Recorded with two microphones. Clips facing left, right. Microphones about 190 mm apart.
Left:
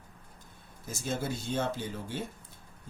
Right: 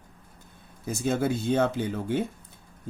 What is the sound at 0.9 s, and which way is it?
Speech, 60° right (ahead or behind).